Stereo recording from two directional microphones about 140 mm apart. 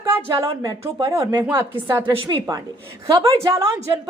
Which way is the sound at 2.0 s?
35° right (ahead or behind).